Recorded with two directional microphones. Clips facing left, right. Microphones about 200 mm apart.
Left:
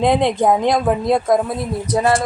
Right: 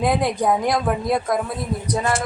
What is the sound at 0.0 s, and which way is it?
Speech, 25° left (ahead or behind).